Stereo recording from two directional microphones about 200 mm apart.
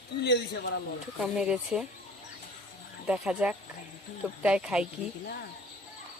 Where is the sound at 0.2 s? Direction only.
60° left (ahead or behind).